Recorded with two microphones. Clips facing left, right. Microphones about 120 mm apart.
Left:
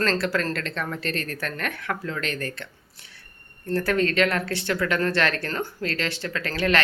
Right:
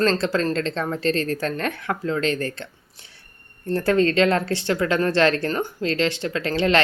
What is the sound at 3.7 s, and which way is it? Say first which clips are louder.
Speech: right 4 dB; 25° right (ahead or behind).